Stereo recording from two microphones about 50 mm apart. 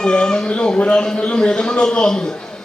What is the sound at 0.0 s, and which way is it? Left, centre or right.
A man's voice, centre.